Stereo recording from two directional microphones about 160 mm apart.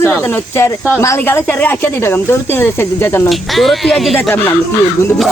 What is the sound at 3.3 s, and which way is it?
Speech, centre (ahead or behind).